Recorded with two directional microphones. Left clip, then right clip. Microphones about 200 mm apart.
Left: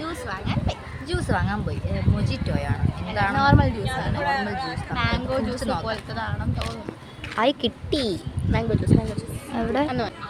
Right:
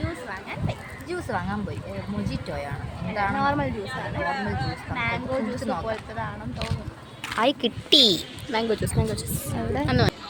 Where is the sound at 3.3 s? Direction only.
15° left (ahead or behind).